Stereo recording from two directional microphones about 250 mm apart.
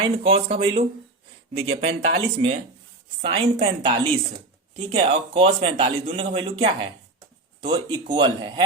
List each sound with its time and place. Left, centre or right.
0.0 s a man's voice: right